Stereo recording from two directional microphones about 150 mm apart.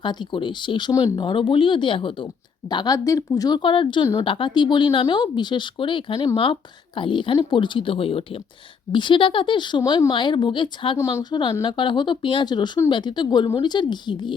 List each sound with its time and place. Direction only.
0.0 s a woman's voice: 30° left (ahead or behind)
10.9 s a woman's voice: 20° left (ahead or behind)